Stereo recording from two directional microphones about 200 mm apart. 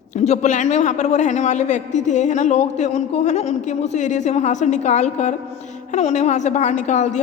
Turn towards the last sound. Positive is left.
turn(degrees=35)  # may be behind; listen again after turning